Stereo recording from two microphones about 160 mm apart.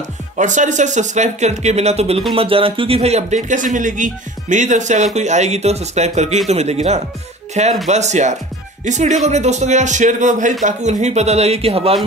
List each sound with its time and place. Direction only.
0.4 s speech: 50° right (ahead or behind)